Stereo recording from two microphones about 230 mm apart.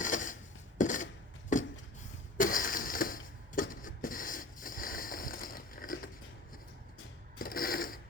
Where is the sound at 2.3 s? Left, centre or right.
Left.